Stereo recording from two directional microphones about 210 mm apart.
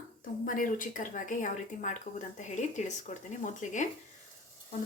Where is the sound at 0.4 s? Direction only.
40° left (ahead or behind).